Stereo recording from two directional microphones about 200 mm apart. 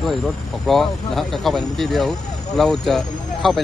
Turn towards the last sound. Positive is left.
turn(degrees=0)  # may be behind; listen again after turning